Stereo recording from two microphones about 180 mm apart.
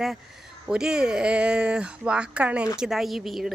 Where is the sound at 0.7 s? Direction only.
5° right (ahead or behind).